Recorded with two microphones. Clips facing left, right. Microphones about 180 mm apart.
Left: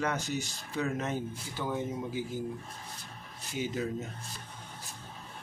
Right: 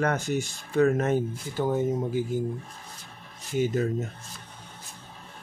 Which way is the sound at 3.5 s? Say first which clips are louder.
Right 8 dB; 50° right (ahead or behind).